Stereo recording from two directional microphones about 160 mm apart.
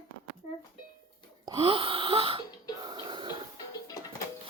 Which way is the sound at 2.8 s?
25° right (ahead or behind).